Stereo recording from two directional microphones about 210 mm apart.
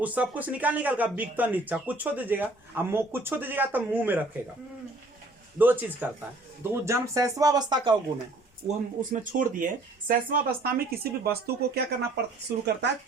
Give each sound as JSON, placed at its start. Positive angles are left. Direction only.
{"t": 0.0, "sound": "speech", "side_deg": -5}
{"t": 5.5, "sound": "speech", "side_deg": -10}
{"t": 8.6, "sound": "speech", "side_deg": -40}